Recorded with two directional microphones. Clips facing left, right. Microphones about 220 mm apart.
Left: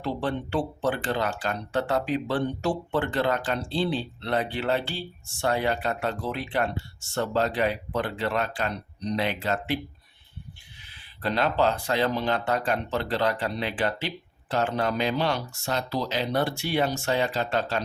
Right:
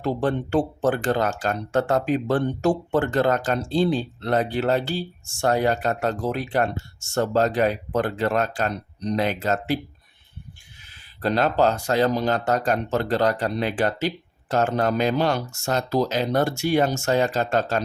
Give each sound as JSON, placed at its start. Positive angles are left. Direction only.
{"t": 0.0, "sound": "speech", "side_deg": -45}
{"t": 10.8, "sound": "speech", "side_deg": -45}